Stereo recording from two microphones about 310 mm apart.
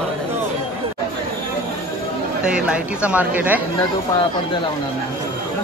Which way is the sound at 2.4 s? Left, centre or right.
Centre.